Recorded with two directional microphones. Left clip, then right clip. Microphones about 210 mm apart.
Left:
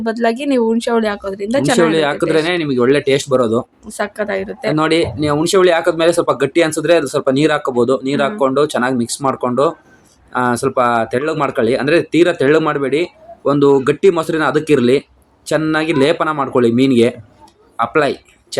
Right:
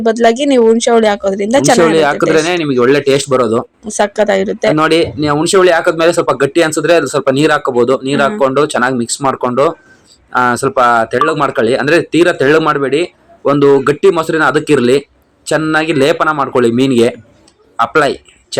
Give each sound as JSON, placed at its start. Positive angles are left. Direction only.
{"t": 0.0, "sound": "speech", "side_deg": -10}